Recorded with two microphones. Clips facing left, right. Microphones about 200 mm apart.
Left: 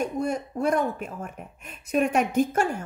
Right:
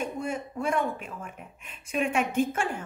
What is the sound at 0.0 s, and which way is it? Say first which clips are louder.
A woman's voice: left 5 dB; 40° left (ahead or behind).